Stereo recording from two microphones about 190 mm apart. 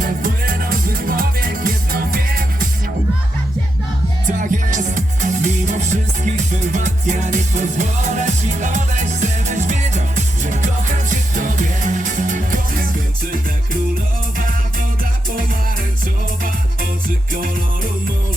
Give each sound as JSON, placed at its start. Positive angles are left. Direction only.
{"t": 0.0, "sound": "music", "side_deg": -45}
{"t": 4.3, "sound": "music", "side_deg": -45}